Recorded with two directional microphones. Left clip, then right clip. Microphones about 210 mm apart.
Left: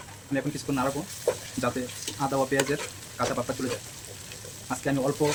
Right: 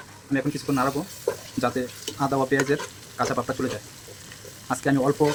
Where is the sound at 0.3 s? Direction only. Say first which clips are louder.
Right 4 dB; 25° right (ahead or behind).